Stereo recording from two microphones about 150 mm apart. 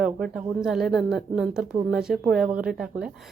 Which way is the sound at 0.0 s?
5° right (ahead or behind).